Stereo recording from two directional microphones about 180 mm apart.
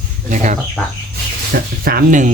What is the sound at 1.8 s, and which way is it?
Speech, 55° right (ahead or behind).